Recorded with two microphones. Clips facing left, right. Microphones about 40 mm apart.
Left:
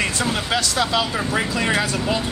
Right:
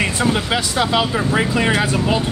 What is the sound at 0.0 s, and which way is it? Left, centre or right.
Speech, centre.